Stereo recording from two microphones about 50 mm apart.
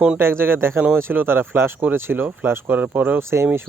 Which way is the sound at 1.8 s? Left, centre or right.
Right.